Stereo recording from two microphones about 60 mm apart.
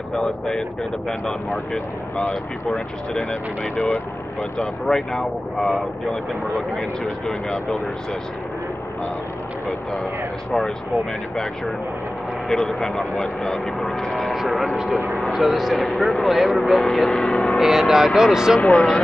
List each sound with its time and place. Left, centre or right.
0.1 s speech: centre
2.1 s speech: left
3.2 s speech: centre
3.7 s speech: left
4.6 s speech: centre
6.8 s speech: centre
12.4 s speech: centre
17.6 s speech: centre
18.6 s speech: centre